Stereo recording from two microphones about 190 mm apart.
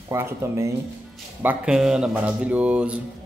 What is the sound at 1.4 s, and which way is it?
A man's voice, 5° right (ahead or behind).